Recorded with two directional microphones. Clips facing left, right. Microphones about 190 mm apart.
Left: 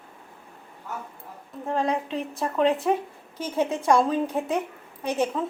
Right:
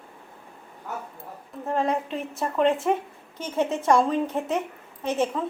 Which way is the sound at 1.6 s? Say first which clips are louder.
Even; centre (ahead or behind).